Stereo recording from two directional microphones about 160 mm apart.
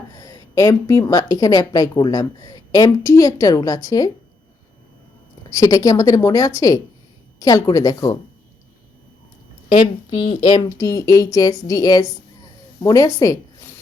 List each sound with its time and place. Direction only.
0.1 s a woman's voice: 20° left (ahead or behind)
5.5 s a woman's voice: 20° left (ahead or behind)
10.1 s speech: 30° left (ahead or behind)
10.8 s a woman's voice: 20° left (ahead or behind)